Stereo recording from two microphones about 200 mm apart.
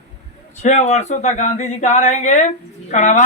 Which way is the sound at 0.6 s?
35° left (ahead or behind).